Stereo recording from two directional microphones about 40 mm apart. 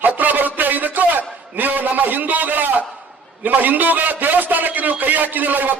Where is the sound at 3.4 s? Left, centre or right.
Right.